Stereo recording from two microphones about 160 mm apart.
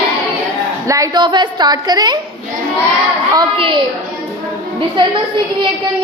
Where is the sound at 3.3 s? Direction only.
30° right (ahead or behind).